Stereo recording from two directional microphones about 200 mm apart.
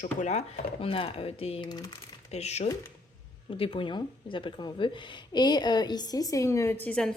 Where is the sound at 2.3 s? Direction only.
35° left (ahead or behind).